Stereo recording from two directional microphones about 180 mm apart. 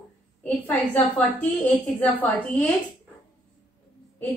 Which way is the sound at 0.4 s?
10° left (ahead or behind).